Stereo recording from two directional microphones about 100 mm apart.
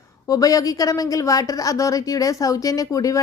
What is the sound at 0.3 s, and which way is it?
A woman's voice, 35° left (ahead or behind).